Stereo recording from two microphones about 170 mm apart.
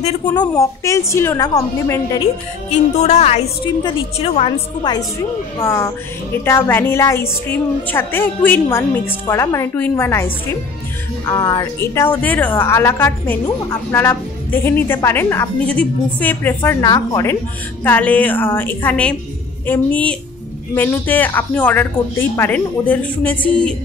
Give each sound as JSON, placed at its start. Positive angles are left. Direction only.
{"t": 0.4, "sound": "a woman's voice", "side_deg": 20}
{"t": 2.7, "sound": "a woman's voice", "side_deg": 40}
{"t": 4.9, "sound": "a woman's voice", "side_deg": 25}